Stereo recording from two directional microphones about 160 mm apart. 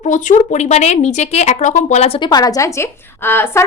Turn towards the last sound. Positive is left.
turn(degrees=15)  # may be behind; listen again after turning